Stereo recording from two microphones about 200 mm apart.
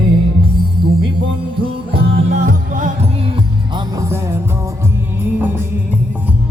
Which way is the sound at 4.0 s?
15° right (ahead or behind).